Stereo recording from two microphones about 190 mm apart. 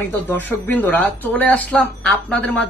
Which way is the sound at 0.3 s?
10° left (ahead or behind).